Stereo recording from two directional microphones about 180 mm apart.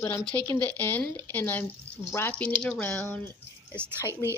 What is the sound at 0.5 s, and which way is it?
Speech, 10° left (ahead or behind).